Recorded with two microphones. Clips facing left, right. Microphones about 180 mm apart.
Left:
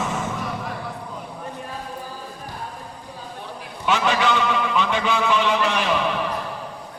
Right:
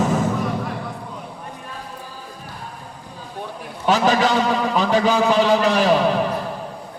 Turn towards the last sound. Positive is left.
turn(degrees=-35)  # may be behind; listen again after turning